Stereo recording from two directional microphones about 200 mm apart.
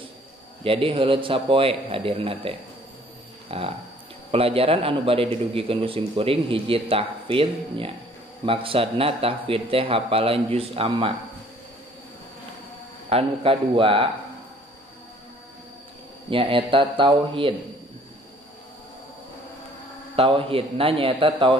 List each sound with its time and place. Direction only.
0.7 s a man's voice: 25° right (ahead or behind)
13.1 s a man's voice: 30° right (ahead or behind)
16.3 s a man's voice: 25° right (ahead or behind)
20.2 s a man's voice: 25° right (ahead or behind)